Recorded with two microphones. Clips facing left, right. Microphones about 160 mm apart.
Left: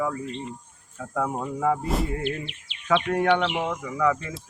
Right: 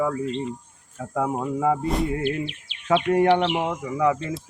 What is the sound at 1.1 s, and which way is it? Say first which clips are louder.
Speech: right 3 dB; 15° right (ahead or behind).